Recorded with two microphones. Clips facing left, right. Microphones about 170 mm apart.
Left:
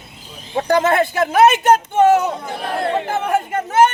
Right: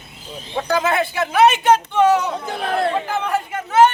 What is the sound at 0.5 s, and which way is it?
Speech, 45° left (ahead or behind).